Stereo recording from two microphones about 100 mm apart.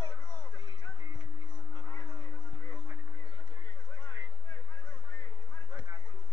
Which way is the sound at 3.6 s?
20° left (ahead or behind).